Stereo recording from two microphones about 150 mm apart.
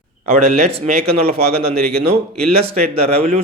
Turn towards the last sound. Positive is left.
turn(degrees=-45)  # may be behind; listen again after turning